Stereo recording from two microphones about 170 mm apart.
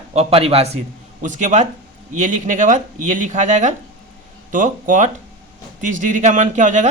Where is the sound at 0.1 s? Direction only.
35° right (ahead or behind).